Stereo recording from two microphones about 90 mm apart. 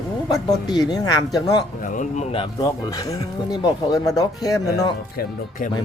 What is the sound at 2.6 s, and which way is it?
Speech, 45° left (ahead or behind).